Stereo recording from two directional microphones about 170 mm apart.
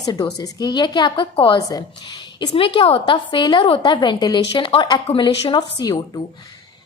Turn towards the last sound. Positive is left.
turn(degrees=25)  # may be behind; listen again after turning